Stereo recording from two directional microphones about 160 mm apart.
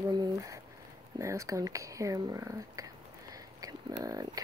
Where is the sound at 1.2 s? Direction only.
20° right (ahead or behind).